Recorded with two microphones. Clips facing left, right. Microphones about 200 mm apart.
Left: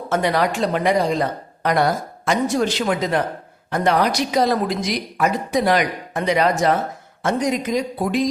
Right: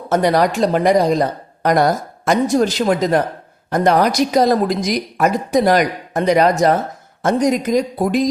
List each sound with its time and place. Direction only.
0.1 s a woman's voice: 40° right (ahead or behind)